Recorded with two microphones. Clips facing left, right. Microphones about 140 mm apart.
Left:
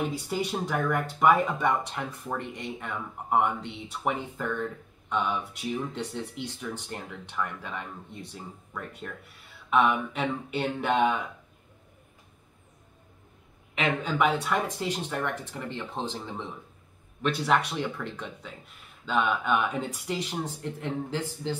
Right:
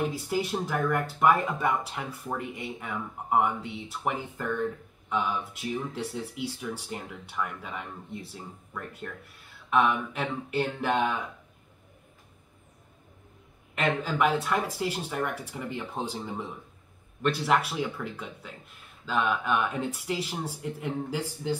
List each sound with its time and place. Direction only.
0.0 s speech: centre (ahead or behind)
13.8 s speech: centre (ahead or behind)